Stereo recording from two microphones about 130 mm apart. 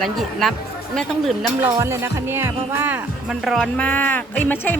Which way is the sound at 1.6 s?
20° right (ahead or behind).